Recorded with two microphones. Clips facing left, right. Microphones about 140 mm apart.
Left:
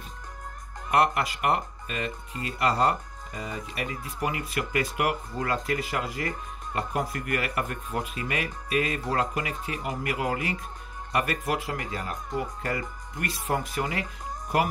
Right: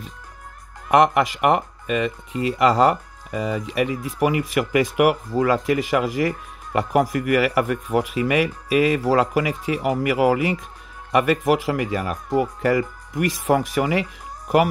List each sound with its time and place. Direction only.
0.8 s speech: 90° right